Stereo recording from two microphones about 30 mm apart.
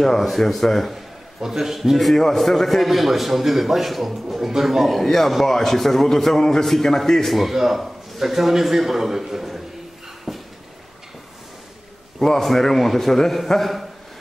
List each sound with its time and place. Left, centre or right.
0.0 s a man's voice: centre
0.9 s a sound: centre
2.1 s a man's voice: centre
7.2 s a man's voice: centre
10.3 s a sound: centre
12.2 s a man's voice: centre